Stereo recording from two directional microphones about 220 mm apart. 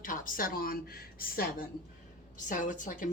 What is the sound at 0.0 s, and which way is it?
A woman's voice, 40° left (ahead or behind).